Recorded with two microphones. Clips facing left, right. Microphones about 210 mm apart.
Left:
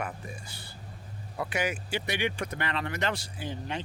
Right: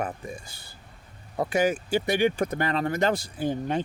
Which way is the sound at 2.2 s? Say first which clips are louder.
Right 8 dB; 40° right (ahead or behind).